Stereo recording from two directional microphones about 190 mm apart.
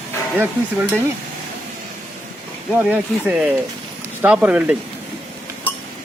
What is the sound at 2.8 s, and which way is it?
Speech, 5° right (ahead or behind).